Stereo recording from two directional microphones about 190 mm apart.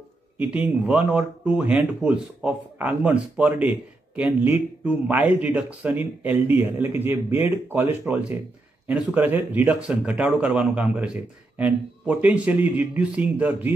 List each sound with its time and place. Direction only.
0.4 s speech: 5° right (ahead or behind)